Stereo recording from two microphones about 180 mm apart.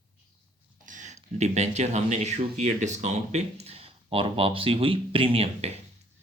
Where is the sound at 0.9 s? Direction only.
45° right (ahead or behind).